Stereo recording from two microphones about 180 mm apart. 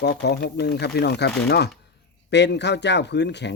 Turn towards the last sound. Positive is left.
turn(degrees=70)  # may be behind; listen again after turning